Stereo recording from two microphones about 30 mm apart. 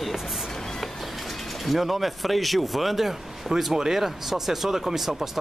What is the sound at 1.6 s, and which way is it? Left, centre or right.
Speech, centre.